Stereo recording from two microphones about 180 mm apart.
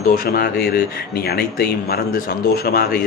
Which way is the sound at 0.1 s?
55° left (ahead or behind).